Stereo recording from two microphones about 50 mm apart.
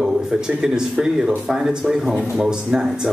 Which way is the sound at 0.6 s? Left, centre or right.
Centre.